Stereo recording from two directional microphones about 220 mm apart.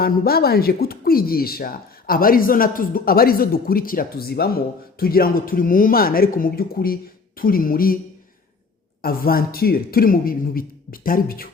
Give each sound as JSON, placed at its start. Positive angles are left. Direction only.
{"t": 0.0, "sound": "speech", "side_deg": 45}
{"t": 9.0, "sound": "speech", "side_deg": 40}